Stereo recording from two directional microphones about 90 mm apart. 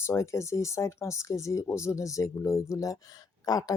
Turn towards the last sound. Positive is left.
turn(degrees=45)  # may be behind; listen again after turning